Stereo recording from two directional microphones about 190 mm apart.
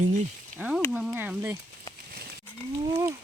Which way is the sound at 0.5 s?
5° right (ahead or behind).